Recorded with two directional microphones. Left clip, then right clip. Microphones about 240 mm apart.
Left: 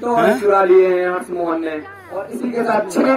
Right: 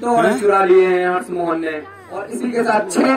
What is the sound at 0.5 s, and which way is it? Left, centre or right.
A man's voice, right.